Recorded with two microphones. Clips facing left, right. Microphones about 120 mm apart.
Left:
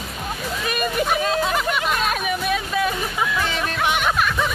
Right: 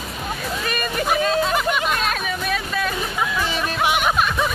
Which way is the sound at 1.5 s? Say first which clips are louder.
Right 1 dB; centre (ahead or behind).